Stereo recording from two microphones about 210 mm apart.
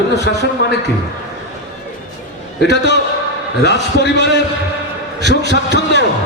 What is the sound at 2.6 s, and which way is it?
A man's voice, 55° left (ahead or behind).